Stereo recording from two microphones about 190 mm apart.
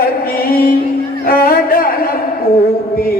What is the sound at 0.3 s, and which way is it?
Music, 50° left (ahead or behind).